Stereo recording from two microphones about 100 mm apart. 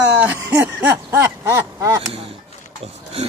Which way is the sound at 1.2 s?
30° right (ahead or behind).